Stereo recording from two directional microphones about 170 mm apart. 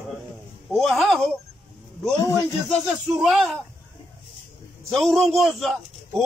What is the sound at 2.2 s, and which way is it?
Speech, 20° left (ahead or behind).